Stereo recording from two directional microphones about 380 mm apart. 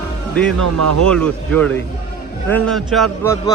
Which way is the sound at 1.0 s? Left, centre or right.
Centre.